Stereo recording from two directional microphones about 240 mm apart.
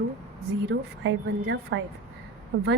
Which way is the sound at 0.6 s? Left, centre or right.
Right.